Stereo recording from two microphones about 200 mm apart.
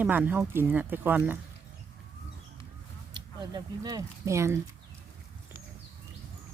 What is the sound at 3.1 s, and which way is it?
Speech, 20° right (ahead or behind).